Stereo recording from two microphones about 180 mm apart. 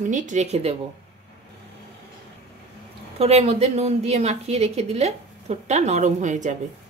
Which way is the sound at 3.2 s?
35° right (ahead or behind).